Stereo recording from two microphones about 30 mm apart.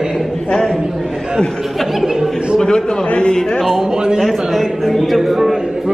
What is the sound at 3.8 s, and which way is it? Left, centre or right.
Speech, right.